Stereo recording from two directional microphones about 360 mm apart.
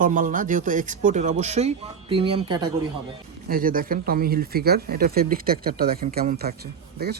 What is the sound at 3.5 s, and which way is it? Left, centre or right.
Speech, right.